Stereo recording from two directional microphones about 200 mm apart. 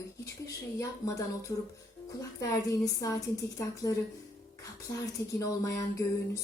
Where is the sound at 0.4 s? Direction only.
15° left (ahead or behind).